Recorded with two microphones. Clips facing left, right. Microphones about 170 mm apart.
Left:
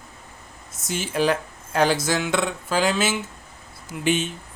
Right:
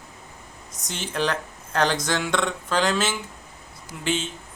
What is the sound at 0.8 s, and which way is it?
Speech, 10° left (ahead or behind).